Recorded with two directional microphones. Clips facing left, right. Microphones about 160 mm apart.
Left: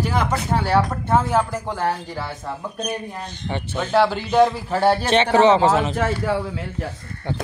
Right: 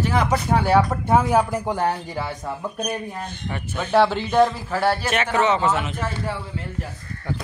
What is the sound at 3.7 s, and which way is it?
Speech, centre (ahead or behind).